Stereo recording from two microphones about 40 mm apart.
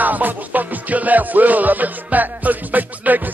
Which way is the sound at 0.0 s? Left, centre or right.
Right.